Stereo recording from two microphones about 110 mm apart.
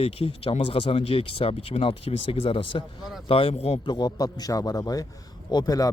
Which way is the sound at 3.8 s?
40° left (ahead or behind).